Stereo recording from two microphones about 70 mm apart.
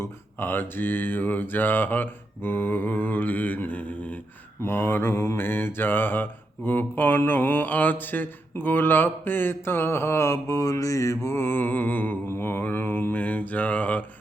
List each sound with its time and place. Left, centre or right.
0.0 s speech: left
4.6 s mantra: left
12.4 s speech: left